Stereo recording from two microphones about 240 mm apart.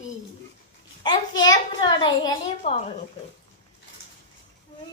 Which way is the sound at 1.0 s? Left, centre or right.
Centre.